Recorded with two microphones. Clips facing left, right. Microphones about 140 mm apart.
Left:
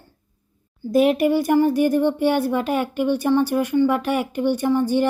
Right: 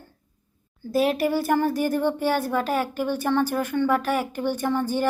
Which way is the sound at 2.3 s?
15° left (ahead or behind).